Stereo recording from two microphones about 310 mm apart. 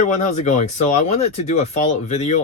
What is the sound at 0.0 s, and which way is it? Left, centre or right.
Speech, left.